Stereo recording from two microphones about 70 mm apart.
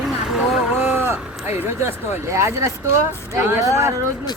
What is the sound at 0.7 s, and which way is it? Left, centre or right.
Speech, right.